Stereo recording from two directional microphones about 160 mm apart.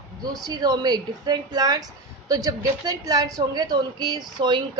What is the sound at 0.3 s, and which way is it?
A woman's voice, 25° right (ahead or behind).